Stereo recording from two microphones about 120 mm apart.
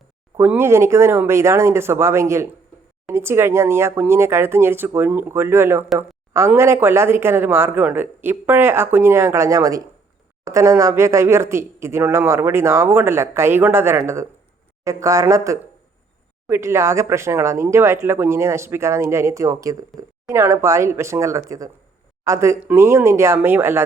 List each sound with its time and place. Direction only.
0.3 s speech: 20° right (ahead or behind)
6.0 s a sound: 20° right (ahead or behind)
6.6 s speech: 20° right (ahead or behind)